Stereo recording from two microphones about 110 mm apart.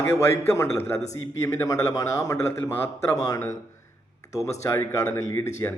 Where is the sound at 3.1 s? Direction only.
35° left (ahead or behind).